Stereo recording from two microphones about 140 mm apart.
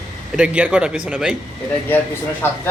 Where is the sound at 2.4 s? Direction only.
15° left (ahead or behind).